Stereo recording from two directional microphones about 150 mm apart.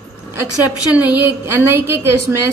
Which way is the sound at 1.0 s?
10° right (ahead or behind).